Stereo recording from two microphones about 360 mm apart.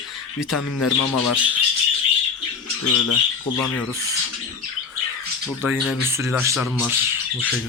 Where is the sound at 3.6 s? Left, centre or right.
Centre.